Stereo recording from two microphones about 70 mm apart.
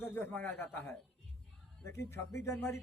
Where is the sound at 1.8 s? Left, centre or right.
Left.